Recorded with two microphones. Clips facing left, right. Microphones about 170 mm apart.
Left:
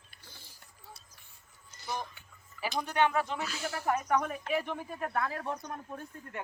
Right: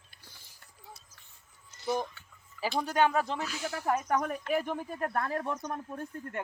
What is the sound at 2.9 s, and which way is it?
Speech, 40° right (ahead or behind).